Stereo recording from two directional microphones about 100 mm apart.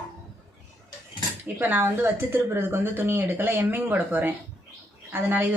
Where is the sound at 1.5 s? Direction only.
20° right (ahead or behind).